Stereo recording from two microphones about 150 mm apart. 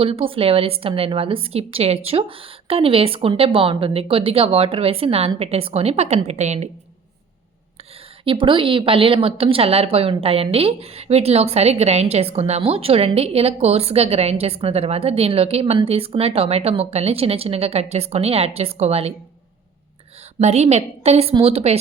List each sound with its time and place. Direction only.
0.0 s a woman's voice: 40° right (ahead or behind)
8.2 s a woman's voice: 35° right (ahead or behind)
20.4 s a woman's voice: 45° right (ahead or behind)